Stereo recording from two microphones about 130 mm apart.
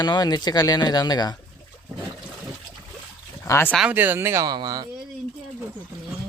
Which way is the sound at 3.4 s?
20° left (ahead or behind).